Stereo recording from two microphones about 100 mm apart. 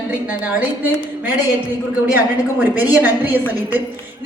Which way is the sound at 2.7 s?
15° right (ahead or behind).